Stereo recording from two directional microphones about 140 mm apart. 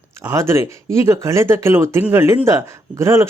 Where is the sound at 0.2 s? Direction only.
20° right (ahead or behind).